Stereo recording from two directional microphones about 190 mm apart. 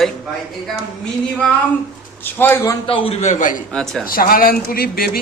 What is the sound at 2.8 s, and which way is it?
Speech, 30° left (ahead or behind).